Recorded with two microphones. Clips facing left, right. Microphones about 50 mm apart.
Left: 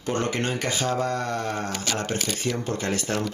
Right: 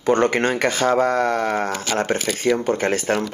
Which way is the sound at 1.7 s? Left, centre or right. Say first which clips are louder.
Right 5 dB; right.